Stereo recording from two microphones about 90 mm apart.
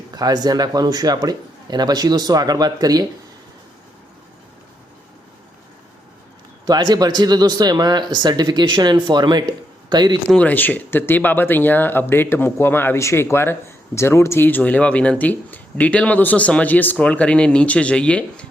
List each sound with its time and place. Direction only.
0.1 s speech: 45° right (ahead or behind)
6.7 s speech: 50° right (ahead or behind)
10.3 s speech: 20° left (ahead or behind)